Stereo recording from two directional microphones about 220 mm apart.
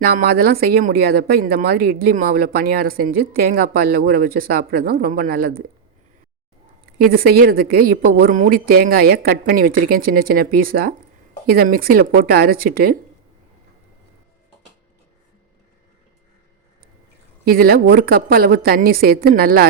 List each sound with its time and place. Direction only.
0.0 s speech: 45° right (ahead or behind)
6.8 s speech: 40° right (ahead or behind)
17.4 s speech: 40° right (ahead or behind)